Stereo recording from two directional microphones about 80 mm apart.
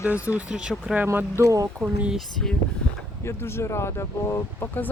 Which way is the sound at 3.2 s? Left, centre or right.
Left.